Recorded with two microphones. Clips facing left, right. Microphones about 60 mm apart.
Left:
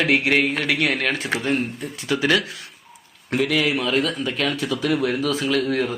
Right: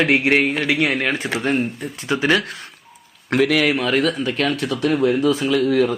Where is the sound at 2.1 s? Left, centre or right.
Right.